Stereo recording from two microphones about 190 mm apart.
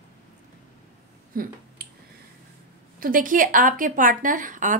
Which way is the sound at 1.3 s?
50° right (ahead or behind).